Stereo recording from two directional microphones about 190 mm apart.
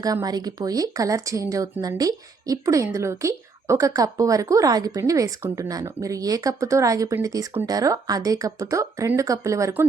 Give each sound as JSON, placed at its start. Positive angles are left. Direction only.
{"t": 0.0, "sound": "a woman's voice", "side_deg": -20}